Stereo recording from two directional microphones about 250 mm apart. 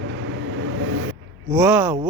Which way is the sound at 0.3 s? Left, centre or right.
Right.